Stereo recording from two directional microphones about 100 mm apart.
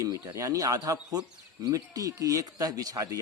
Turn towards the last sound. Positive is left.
turn(degrees=-35)  # may be behind; listen again after turning